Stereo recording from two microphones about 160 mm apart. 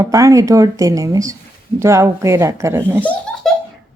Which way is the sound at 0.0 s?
20° right (ahead or behind).